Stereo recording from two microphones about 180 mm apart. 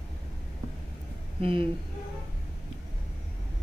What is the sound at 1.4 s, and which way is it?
Speech, 30° right (ahead or behind).